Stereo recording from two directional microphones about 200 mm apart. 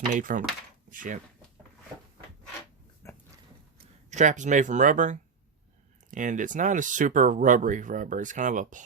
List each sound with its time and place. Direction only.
0.1 s speech: 40° right (ahead or behind)
3.0 s a sound: 15° left (ahead or behind)
4.1 s speech: 35° right (ahead or behind)